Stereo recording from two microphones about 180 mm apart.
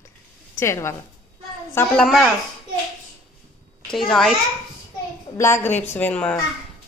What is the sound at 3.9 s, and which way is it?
Speech, centre (ahead or behind).